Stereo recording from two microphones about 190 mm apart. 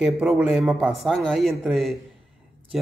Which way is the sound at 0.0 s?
5° right (ahead or behind).